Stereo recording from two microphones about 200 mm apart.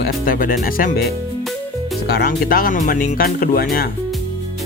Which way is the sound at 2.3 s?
45° left (ahead or behind).